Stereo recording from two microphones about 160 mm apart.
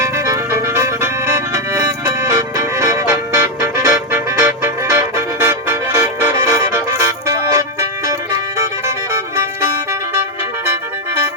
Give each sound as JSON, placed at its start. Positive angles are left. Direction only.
{"t": 0.0, "sound": "music", "side_deg": -20}
{"t": 9.3, "sound": "music", "side_deg": -20}